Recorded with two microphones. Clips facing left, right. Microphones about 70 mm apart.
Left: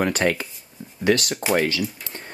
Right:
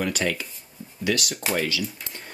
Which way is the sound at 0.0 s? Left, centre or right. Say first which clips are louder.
Left 5 dB; left.